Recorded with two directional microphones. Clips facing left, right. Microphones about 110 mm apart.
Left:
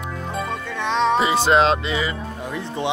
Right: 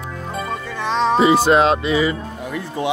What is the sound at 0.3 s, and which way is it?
Music, centre (ahead or behind).